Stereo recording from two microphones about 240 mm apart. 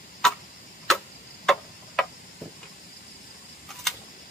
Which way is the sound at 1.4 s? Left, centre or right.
Centre.